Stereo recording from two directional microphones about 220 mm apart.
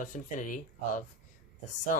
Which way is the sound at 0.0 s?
35° left (ahead or behind).